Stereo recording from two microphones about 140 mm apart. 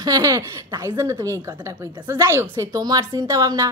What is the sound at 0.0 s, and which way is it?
Speech, 25° right (ahead or behind).